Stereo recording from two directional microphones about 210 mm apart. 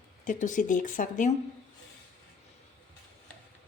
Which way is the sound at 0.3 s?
35° left (ahead or behind).